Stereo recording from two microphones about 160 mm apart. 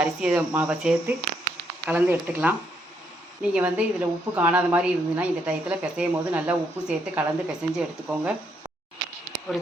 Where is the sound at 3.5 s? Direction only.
10° right (ahead or behind).